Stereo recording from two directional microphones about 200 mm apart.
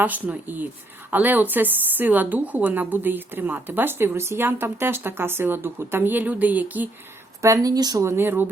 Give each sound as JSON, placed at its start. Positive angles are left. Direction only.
{"t": 0.0, "sound": "speech", "side_deg": -10}